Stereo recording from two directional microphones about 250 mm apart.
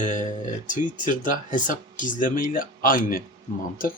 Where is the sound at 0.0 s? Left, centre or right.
Left.